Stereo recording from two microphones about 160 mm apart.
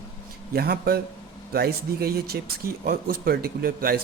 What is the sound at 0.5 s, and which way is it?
A man's voice, 75° right (ahead or behind).